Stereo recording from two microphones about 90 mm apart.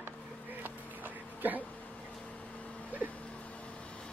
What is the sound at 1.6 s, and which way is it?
Insect, 15° left (ahead or behind).